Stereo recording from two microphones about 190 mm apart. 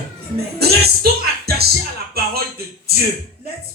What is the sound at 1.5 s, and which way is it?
Music, 55° right (ahead or behind).